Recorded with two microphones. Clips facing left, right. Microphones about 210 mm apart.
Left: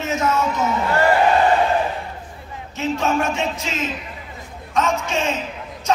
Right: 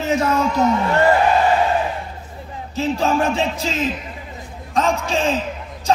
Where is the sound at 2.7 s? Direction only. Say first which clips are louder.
Right 2 dB; 35° right (ahead or behind).